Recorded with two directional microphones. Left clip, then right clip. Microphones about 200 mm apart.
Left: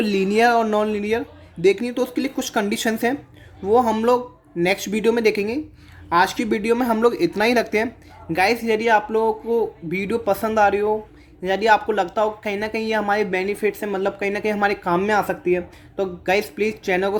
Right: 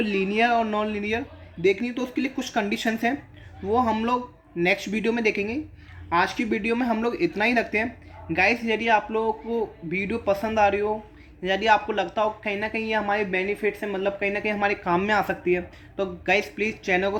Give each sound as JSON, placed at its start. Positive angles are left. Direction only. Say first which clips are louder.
{"t": 0.0, "sound": "a woman's voice", "louder": "left 5 dB", "side_deg": 50}